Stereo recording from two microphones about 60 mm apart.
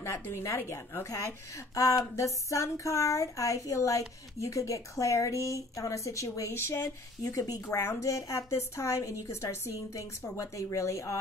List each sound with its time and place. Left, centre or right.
0.0 s a woman's voice: left
1.0 s speech: left
8.0 s speech: left